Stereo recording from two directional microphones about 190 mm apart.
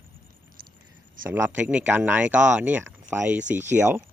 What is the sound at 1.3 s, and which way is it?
Speech, 10° right (ahead or behind).